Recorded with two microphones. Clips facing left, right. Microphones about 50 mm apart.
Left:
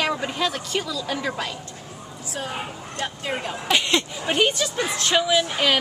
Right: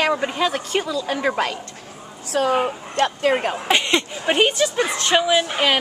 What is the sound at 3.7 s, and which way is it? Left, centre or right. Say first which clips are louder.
Speech: right 2 dB; centre.